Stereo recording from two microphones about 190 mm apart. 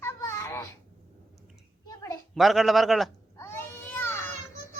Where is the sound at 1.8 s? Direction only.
15° left (ahead or behind).